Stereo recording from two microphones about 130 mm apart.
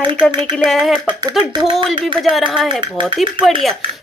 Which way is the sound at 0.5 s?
Centre (ahead or behind).